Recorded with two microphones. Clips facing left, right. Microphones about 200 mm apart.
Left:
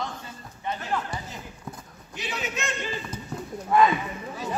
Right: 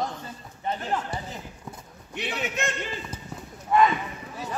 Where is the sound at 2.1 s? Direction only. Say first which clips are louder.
Right 2 dB; 60° right (ahead or behind).